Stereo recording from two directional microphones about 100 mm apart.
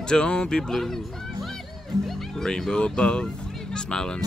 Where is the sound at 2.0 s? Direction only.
5° left (ahead or behind).